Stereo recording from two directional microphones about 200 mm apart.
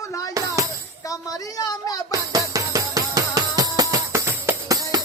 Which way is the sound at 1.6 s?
20° left (ahead or behind).